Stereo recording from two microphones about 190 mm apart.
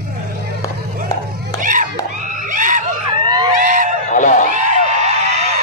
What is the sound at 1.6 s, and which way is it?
Chop, 45° right (ahead or behind).